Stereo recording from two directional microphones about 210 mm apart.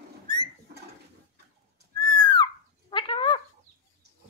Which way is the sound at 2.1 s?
20° left (ahead or behind).